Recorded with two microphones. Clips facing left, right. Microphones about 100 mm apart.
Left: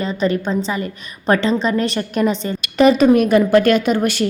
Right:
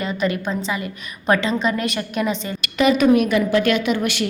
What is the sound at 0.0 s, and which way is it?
A woman's voice, 30° left (ahead or behind).